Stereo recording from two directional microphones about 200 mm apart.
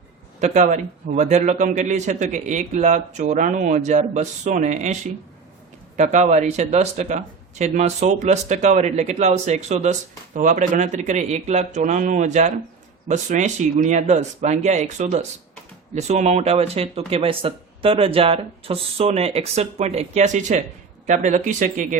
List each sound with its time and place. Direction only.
0.3 s speech: 35° right (ahead or behind)
6.0 s speech: 35° right (ahead or behind)